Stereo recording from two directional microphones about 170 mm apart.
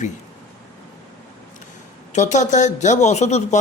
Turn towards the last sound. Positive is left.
turn(degrees=40)  # may be behind; listen again after turning